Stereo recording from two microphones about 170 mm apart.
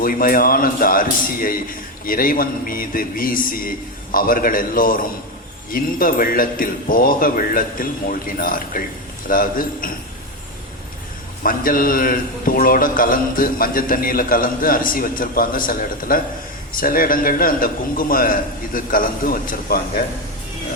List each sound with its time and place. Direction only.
0.0 s a man's voice: 55° left (ahead or behind)
11.4 s a man's voice: 55° left (ahead or behind)